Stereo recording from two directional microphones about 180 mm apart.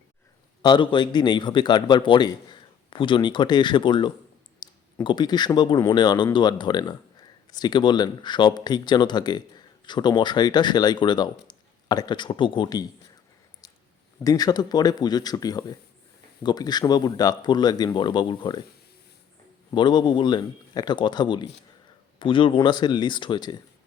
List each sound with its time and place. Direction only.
0.6 s speech: 25° left (ahead or behind)
14.3 s speech: 20° left (ahead or behind)
19.7 s speech: 25° left (ahead or behind)